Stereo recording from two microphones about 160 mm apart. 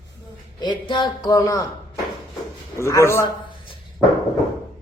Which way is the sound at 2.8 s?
15° left (ahead or behind).